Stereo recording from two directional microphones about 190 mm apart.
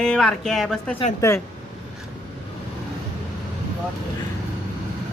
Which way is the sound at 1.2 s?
15° left (ahead or behind).